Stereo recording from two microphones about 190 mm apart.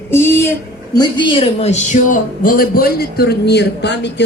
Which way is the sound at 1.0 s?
25° left (ahead or behind).